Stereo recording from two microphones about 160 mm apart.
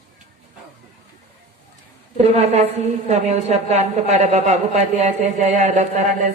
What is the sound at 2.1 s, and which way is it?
A woman's voice, 40° right (ahead or behind).